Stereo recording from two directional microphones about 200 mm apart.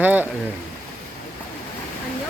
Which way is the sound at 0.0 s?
10° right (ahead or behind).